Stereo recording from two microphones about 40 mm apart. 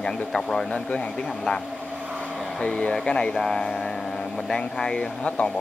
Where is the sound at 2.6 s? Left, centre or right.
Left.